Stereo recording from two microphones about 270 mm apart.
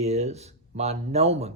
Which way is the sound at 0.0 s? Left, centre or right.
Right.